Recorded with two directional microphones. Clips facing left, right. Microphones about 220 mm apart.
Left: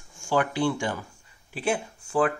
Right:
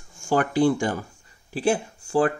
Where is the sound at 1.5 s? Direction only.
30° right (ahead or behind).